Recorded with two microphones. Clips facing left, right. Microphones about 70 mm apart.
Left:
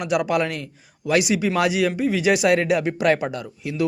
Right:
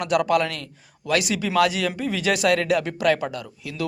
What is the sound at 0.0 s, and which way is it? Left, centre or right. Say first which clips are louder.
Speech: right 1 dB; centre.